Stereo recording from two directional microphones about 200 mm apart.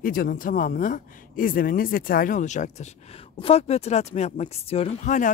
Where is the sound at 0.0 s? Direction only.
45° left (ahead or behind).